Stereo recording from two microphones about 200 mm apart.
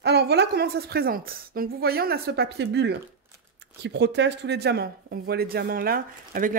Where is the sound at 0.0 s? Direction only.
55° right (ahead or behind).